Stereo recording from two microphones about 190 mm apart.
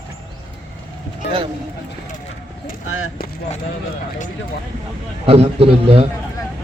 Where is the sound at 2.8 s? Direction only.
90° left.